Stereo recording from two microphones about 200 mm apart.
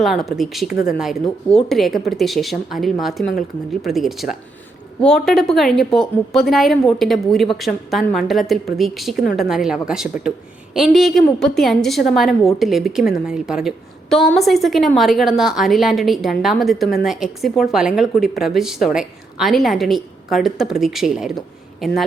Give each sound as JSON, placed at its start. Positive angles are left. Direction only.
{"t": 0.0, "sound": "a woman's voice", "side_deg": 0}